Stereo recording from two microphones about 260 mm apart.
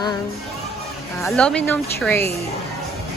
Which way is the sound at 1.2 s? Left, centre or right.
Centre.